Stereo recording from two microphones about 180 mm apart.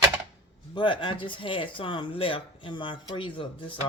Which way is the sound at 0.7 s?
25° left (ahead or behind).